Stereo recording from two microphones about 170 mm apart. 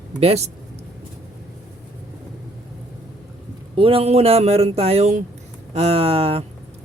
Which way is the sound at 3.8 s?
30° right (ahead or behind).